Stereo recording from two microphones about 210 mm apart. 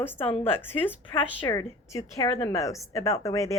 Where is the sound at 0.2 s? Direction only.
25° left (ahead or behind).